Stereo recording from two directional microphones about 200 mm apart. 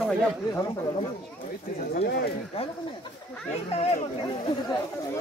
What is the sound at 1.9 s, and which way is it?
Speech, 50° left (ahead or behind).